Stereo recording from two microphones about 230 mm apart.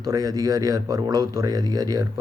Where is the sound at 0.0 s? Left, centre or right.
Centre.